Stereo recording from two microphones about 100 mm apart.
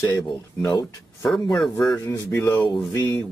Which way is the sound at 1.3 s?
Centre (ahead or behind).